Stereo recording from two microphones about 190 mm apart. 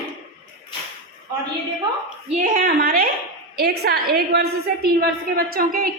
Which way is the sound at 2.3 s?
45° right (ahead or behind).